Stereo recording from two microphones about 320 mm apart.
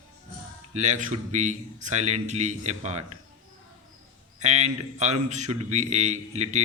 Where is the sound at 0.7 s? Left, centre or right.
Right.